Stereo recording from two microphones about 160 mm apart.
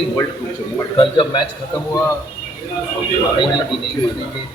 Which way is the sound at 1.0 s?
30° left (ahead or behind).